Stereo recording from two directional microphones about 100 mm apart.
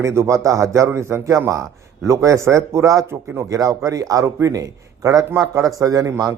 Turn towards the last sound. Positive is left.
turn(degrees=-35)  # may be behind; listen again after turning